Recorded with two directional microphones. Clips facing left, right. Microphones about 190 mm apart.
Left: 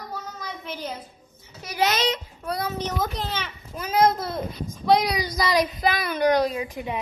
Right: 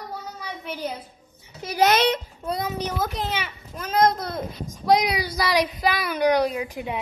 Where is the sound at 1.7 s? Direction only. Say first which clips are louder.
Right 4 dB; 55° right (ahead or behind).